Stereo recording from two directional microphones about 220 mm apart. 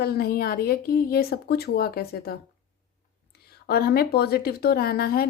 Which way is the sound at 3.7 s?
45° left (ahead or behind).